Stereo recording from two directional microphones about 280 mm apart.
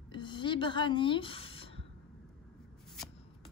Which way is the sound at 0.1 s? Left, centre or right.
Centre.